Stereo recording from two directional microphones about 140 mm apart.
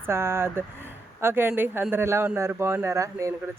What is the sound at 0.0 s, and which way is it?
Speech, 20° right (ahead or behind).